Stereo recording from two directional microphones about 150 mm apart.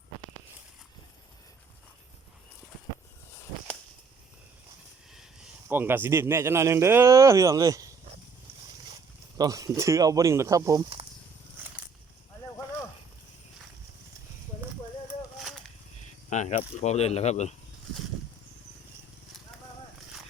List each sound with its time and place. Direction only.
5.6 s speech: 15° right (ahead or behind)
9.4 s speech: 20° right (ahead or behind)
16.3 s speech: 55° left (ahead or behind)